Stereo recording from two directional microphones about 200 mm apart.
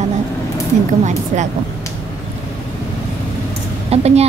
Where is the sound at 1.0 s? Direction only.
35° right (ahead or behind).